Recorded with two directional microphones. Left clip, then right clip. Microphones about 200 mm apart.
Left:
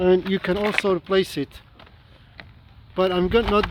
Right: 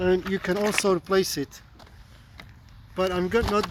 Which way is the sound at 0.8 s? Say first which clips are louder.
Left 1 dB; centre (ahead or behind).